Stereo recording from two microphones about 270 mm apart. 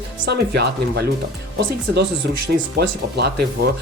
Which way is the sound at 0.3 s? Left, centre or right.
Right.